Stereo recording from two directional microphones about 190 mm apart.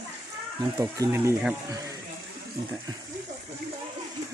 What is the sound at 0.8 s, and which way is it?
Speech, 15° right (ahead or behind).